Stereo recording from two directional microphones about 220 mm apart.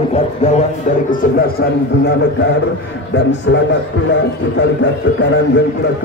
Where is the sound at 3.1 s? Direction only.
55° left (ahead or behind).